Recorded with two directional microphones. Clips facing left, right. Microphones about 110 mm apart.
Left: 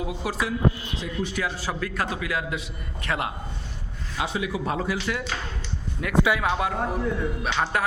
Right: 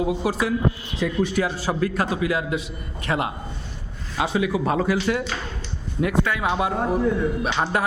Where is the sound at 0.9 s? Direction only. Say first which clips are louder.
Right 7 dB; 60° right (ahead or behind).